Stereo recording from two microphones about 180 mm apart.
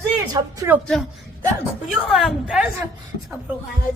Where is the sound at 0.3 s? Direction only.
15° right (ahead or behind).